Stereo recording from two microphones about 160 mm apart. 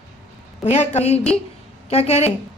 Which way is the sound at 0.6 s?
45° left (ahead or behind).